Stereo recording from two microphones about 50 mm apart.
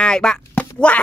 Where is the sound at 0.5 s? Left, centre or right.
Left.